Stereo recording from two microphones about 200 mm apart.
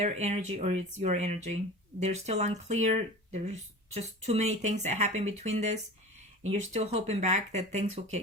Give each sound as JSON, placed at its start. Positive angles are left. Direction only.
{"t": 0.0, "sound": "speech", "side_deg": -35}